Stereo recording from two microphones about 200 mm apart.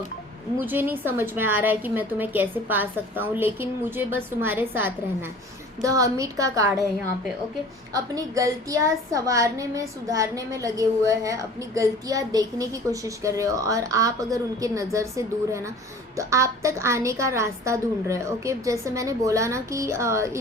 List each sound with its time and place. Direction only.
0.6 s a woman's voice: 10° right (ahead or behind)
7.9 s a woman's voice: 15° right (ahead or behind)